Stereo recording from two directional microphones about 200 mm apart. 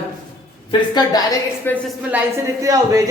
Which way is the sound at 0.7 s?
20° left (ahead or behind).